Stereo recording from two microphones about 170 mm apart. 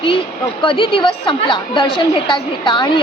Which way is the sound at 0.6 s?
30° left (ahead or behind).